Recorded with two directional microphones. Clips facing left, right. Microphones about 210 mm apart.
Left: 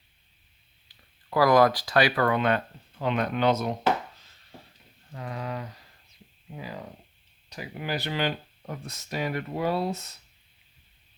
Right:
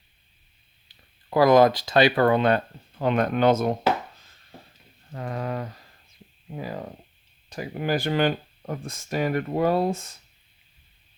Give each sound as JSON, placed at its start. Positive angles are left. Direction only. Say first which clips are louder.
{"t": 0.9, "sound": "speech", "louder": "right 2 dB", "side_deg": -25}
{"t": 3.0, "sound": "speech", "louder": "right 4 dB", "side_deg": -45}
{"t": 5.1, "sound": "a sound", "louder": "right 4 dB", "side_deg": -50}
{"t": 6.6, "sound": "speech", "louder": "right 5 dB", "side_deg": -50}